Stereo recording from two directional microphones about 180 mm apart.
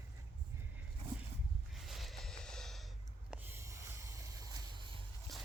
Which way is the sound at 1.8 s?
Centre (ahead or behind).